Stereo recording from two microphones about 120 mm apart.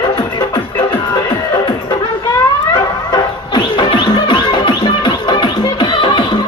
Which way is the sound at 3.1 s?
40° left (ahead or behind).